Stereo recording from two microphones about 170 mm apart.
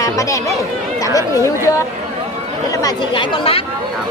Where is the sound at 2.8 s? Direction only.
30° left (ahead or behind).